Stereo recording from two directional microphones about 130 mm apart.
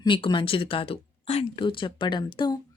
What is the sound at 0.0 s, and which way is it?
A woman's voice, 40° left (ahead or behind).